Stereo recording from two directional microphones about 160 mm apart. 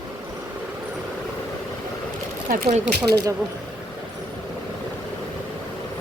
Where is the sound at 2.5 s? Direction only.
65° right (ahead or behind).